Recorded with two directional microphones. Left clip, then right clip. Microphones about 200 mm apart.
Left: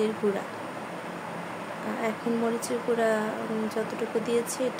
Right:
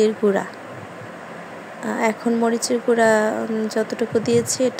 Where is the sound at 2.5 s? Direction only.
40° right (ahead or behind).